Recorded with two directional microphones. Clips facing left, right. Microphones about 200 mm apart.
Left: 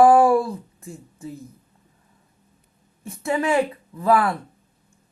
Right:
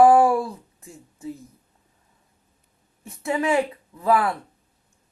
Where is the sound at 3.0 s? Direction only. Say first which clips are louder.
Left 1 dB; 20° right (ahead or behind).